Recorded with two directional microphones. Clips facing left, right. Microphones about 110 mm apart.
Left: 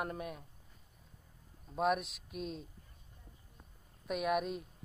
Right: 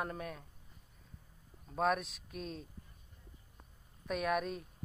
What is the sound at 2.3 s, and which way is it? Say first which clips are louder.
Speech: left 3 dB; 40° right (ahead or behind).